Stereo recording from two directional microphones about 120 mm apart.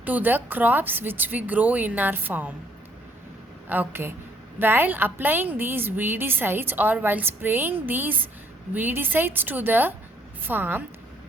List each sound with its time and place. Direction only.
0.0 s a woman's voice: 15° right (ahead or behind)
3.7 s a woman's voice: 15° right (ahead or behind)